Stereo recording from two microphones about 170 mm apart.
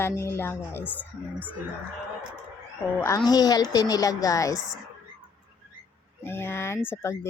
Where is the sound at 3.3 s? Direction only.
20° left (ahead or behind).